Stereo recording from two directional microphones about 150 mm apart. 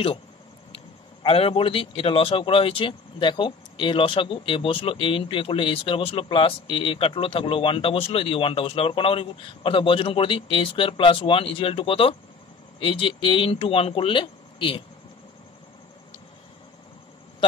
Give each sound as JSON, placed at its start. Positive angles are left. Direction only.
{"t": 0.7, "sound": "a man's voice", "side_deg": 40}